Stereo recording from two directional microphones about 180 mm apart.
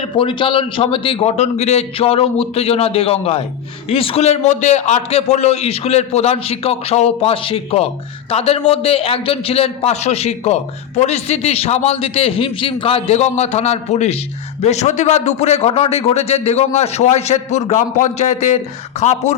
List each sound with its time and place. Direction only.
0.2 s a man's voice: 30° left (ahead or behind)